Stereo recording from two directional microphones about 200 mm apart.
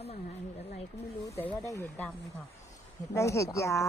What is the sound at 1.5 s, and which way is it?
Speech, 15° left (ahead or behind).